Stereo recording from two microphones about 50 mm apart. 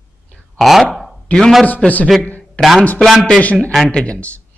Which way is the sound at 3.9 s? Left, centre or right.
Left.